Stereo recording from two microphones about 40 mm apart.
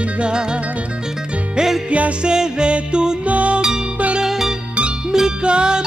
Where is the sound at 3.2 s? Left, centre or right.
Right.